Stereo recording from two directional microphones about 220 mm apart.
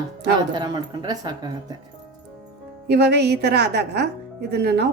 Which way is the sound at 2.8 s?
50° right (ahead or behind).